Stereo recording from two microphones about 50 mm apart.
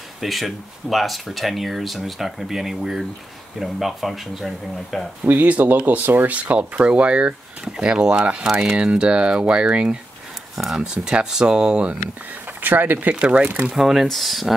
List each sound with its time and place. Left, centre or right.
0.2 s speech: centre
5.2 s speech: right; by 12.0 s centre
12.6 s speech: right
13.7 s speech: centre